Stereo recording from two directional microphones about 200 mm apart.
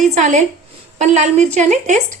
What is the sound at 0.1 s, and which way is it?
A woman's voice, 35° right (ahead or behind).